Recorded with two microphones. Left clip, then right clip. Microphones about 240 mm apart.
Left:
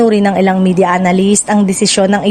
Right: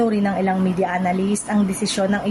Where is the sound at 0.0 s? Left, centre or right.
Left.